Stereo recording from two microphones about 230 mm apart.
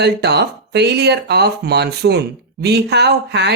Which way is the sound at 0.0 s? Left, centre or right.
Right.